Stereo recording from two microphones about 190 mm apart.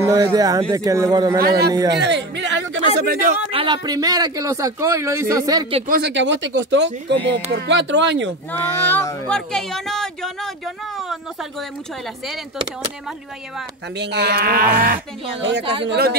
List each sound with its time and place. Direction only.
0.0 s speech: 20° right (ahead or behind)
2.0 s speech: 70° right (ahead or behind)
3.1 s speech: 45° right (ahead or behind)
3.5 s speech: 25° right (ahead or behind)
5.9 s speech: 60° right (ahead or behind)
8.5 s speech: 10° left (ahead or behind)
13.9 s speech: 60° right (ahead or behind)
15.8 s speech: 60° right (ahead or behind)